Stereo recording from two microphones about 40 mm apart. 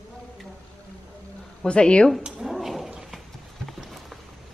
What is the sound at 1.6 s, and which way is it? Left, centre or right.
Speech, left.